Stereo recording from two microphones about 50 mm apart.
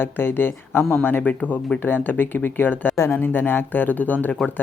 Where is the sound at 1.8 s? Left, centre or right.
Left.